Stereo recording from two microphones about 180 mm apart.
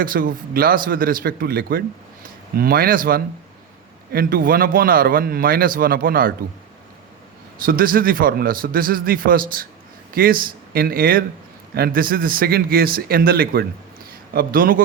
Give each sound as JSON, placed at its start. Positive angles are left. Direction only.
{"t": 0.0, "sound": "a man's voice", "side_deg": -50}
{"t": 7.6, "sound": "a man's voice", "side_deg": -55}